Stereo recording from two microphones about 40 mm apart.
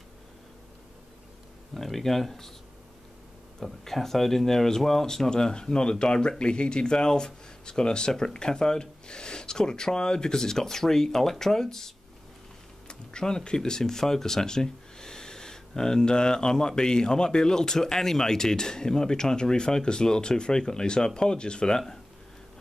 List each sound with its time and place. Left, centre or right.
1.7 s speech: centre
3.5 s speech: centre